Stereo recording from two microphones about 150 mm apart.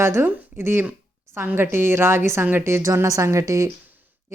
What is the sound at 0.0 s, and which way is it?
Speech, 15° right (ahead or behind).